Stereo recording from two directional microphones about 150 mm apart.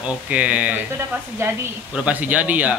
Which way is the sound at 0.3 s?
10° right (ahead or behind).